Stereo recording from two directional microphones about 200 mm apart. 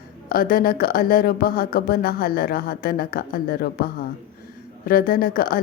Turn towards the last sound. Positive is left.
turn(degrees=45)  # may be behind; listen again after turning